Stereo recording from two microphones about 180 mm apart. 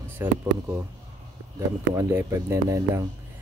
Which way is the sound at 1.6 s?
15° right (ahead or behind).